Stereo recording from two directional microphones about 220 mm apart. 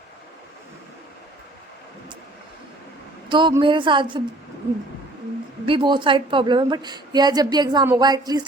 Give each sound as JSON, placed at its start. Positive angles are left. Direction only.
{"t": 3.2, "sound": "a woman's voice", "side_deg": -20}
{"t": 5.6, "sound": "a woman's voice", "side_deg": -20}